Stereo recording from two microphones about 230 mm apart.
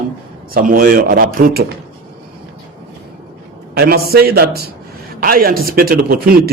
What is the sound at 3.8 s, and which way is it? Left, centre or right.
A man's voice, right.